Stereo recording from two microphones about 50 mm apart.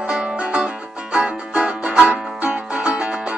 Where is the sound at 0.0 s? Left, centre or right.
Centre.